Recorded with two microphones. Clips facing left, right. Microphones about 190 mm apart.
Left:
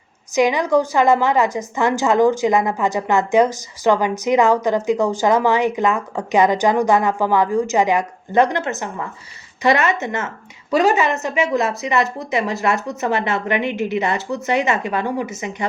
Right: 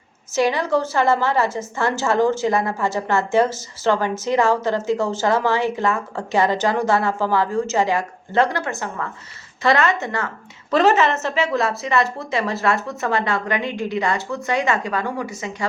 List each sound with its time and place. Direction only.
0.3 s a woman's voice: 15° left (ahead or behind)